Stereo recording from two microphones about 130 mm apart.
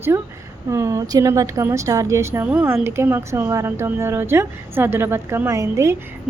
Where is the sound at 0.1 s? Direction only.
20° right (ahead or behind).